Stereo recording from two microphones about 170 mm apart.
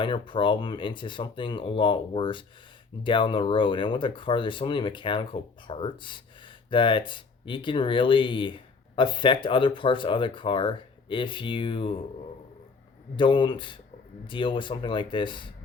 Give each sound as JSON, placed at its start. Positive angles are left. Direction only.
{"t": 0.0, "sound": "speech", "side_deg": 30}
{"t": 13.1, "sound": "speech", "side_deg": 30}